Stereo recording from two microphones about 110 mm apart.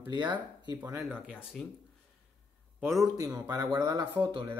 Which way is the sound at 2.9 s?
Centre (ahead or behind).